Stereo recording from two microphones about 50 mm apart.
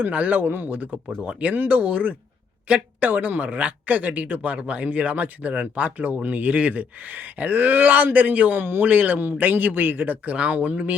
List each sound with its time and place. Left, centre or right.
0.0 s speech: right
0.3 s speech: right
10.2 s speech: right